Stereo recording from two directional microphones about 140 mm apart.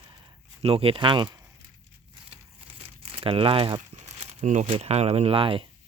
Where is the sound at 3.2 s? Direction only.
40° right (ahead or behind).